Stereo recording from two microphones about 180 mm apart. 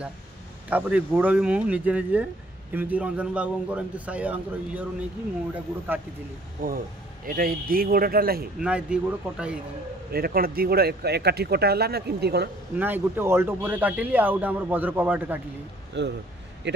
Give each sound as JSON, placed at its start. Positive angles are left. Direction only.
{"t": 0.7, "sound": "speech", "side_deg": -10}
{"t": 7.2, "sound": "speech", "side_deg": -55}
{"t": 8.5, "sound": "speech", "side_deg": -5}
{"t": 10.1, "sound": "speech", "side_deg": -55}
{"t": 12.7, "sound": "speech", "side_deg": -10}
{"t": 16.0, "sound": "speech", "side_deg": -75}